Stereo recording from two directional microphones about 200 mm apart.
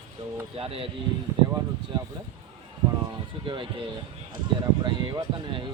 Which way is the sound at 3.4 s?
25° right (ahead or behind).